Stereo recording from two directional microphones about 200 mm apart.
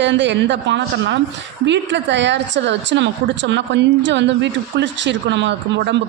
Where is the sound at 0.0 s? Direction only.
65° right (ahead or behind).